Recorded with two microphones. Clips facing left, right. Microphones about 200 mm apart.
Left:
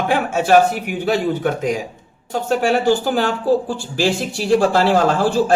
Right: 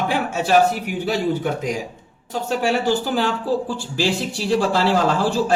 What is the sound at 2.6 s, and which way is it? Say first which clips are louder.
Speech: left 3 dB; 50° left (ahead or behind).